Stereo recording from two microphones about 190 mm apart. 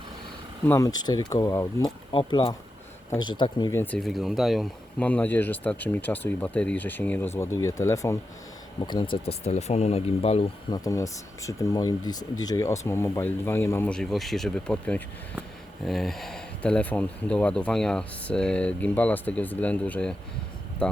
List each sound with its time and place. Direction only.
0.7 s speech: 20° left (ahead or behind)
3.8 s speech: centre (ahead or behind); by 9.0 s 25° left (ahead or behind)
9.2 s speech: 35° left (ahead or behind)
10.8 s speech: 15° left (ahead or behind)